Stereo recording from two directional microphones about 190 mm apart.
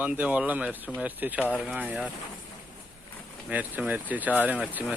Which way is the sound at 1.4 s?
10° left (ahead or behind).